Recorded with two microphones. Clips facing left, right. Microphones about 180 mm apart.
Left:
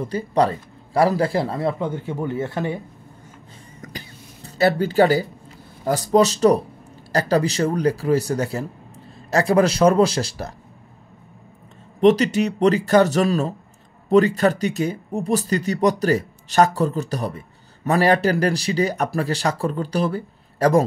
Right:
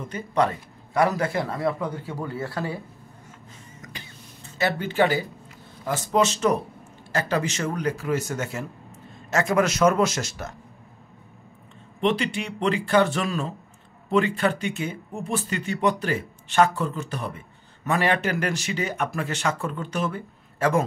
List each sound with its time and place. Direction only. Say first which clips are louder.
0.0 s a man's voice: left 4 dB; 35° left (ahead or behind)
3.8 s a sound: left 7 dB; 35° left (ahead or behind)
5.9 s speech: left 6 dB; 35° left (ahead or behind)
12.0 s speech: left 9 dB; 40° left (ahead or behind)